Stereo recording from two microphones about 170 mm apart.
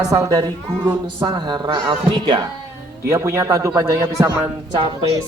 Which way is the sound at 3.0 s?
15° right (ahead or behind).